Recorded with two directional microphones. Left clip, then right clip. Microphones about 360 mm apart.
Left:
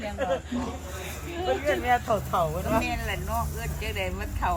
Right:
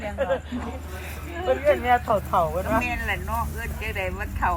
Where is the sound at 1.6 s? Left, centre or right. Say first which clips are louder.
Right 5 dB; centre.